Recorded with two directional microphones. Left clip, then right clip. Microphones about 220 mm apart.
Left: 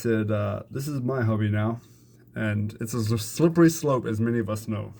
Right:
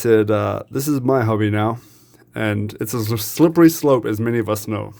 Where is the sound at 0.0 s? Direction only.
55° right (ahead or behind).